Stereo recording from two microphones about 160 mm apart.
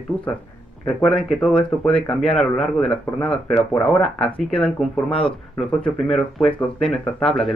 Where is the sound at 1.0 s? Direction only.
5° left (ahead or behind).